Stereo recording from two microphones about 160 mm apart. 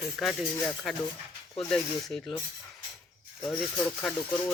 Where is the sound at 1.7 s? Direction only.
Centre (ahead or behind).